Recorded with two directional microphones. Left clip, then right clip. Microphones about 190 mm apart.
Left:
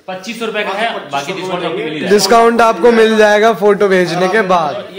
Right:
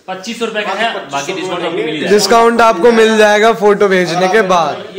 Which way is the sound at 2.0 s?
5° left (ahead or behind).